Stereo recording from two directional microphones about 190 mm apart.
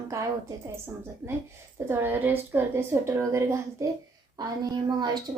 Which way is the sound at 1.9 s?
10° right (ahead or behind).